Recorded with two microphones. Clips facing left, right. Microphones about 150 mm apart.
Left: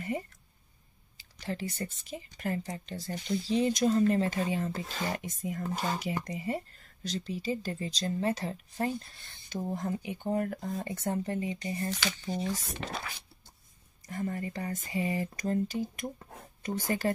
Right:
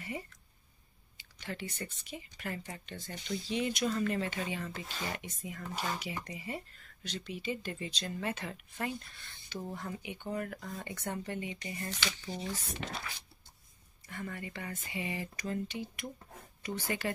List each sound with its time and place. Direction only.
0.0 s a sound: 45° left (ahead or behind)
1.1 s speech: 35° left (ahead or behind)
14.0 s speech: 40° left (ahead or behind)